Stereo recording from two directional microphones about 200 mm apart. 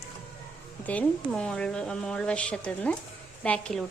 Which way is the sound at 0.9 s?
5° left (ahead or behind).